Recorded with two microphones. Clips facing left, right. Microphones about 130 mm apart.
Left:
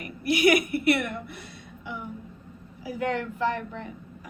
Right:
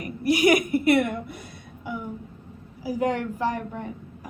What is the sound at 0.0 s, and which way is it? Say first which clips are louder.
A woman's voice: right 2 dB; 40° right (ahead or behind).